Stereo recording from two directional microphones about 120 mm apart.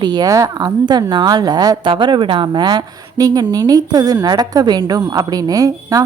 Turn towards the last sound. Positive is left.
turn(degrees=-30)  # may be behind; listen again after turning